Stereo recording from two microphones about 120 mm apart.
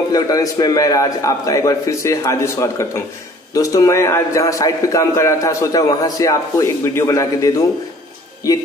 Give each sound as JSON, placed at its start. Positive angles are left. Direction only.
{"t": 0.1, "sound": "a man's voice", "side_deg": 30}